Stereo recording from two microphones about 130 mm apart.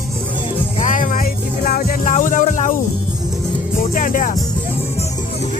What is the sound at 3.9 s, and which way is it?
Music, 90° left.